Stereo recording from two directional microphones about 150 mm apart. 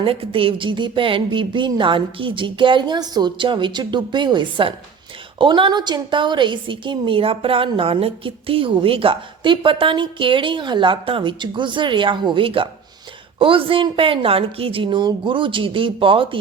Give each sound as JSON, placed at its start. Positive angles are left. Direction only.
{"t": 0.0, "sound": "a woman's voice", "side_deg": -40}